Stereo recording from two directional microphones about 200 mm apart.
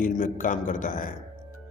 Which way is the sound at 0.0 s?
40° left (ahead or behind).